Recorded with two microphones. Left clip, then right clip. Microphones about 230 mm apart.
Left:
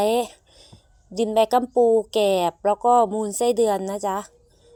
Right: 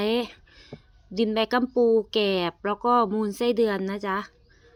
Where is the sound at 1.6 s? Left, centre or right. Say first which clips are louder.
Even; right.